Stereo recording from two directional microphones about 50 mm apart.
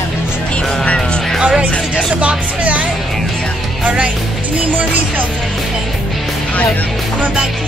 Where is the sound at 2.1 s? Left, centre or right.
Right.